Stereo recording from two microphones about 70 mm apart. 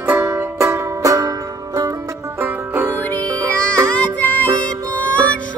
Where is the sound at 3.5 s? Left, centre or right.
Centre.